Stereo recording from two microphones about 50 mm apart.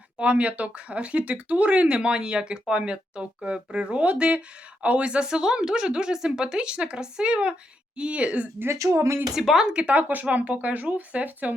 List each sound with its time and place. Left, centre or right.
0.2 s speech: right
8.7 s speech: right
9.3 s speech: centre
9.7 s speech: right